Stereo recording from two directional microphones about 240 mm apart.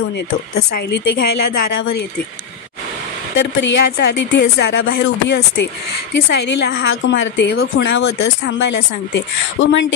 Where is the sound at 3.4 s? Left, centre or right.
Left.